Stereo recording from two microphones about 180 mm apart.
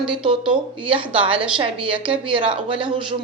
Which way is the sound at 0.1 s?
30° right (ahead or behind).